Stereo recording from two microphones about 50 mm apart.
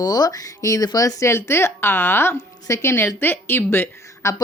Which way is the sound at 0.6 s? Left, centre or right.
Left.